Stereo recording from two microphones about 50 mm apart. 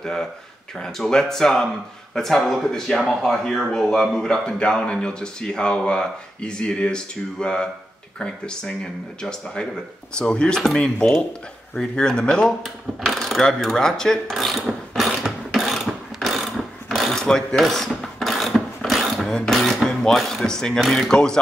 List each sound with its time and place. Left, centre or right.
0.0 s a man's voice: centre
13.0 s speech: centre
13.7 s a man's voice: centre
14.3 s mechanisms: centre
17.1 s mechanisms: centre
19.2 s a sound: centre
20.0 s a man's voice: centre